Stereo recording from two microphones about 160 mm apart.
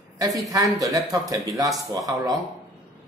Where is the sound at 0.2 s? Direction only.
20° right (ahead or behind).